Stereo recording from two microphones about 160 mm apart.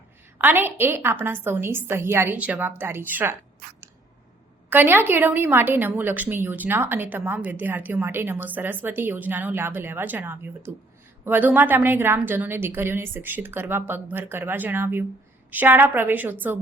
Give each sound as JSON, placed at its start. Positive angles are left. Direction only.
{"t": 0.3, "sound": "a woman's voice", "side_deg": -15}
{"t": 4.7, "sound": "a woman's voice", "side_deg": -15}